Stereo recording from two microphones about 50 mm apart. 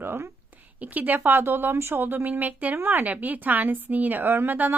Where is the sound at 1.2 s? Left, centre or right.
Right.